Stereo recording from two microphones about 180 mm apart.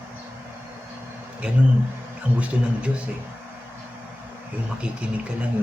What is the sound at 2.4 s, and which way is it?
Speech, 5° right (ahead or behind).